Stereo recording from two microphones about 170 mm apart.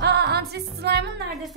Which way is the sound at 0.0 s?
75° right (ahead or behind).